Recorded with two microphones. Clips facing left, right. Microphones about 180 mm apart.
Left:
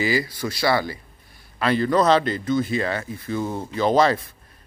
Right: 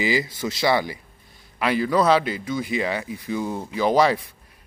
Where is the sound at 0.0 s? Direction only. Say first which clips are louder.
Even; 20° right (ahead or behind).